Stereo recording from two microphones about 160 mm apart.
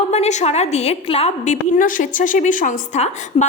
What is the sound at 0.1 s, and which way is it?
A woman's voice, 45° left (ahead or behind).